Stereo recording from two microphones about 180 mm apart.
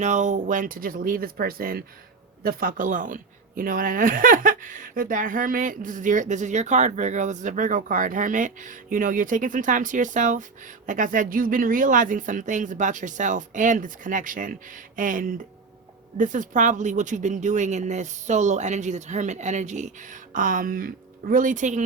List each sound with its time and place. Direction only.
0.0 s speech: 40° right (ahead or behind)